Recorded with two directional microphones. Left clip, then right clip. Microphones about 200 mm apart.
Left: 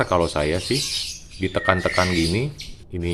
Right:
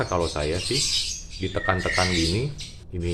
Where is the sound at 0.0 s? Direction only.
45° left (ahead or behind).